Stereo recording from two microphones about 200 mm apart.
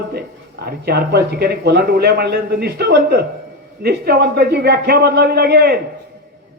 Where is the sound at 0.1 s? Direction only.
50° right (ahead or behind).